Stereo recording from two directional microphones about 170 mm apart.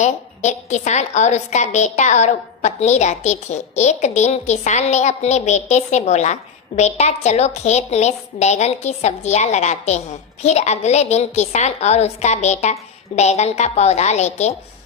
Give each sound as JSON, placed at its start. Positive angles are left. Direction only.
{"t": 0.0, "sound": "a woman's voice", "side_deg": 45}